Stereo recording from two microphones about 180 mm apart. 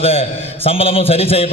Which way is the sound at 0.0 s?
35° left (ahead or behind).